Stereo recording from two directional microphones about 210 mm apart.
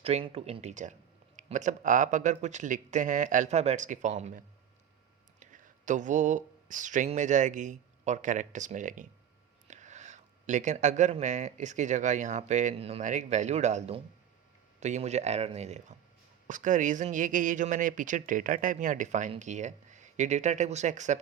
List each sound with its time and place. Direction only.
0.0 s speech: 25° right (ahead or behind)